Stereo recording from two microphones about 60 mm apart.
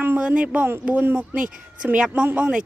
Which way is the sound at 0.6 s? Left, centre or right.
Right.